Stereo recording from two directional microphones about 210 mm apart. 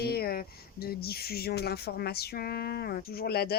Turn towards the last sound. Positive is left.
turn(degrees=50)  # may be behind; listen again after turning